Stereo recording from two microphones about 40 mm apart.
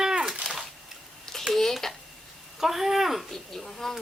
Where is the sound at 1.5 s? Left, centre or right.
Centre.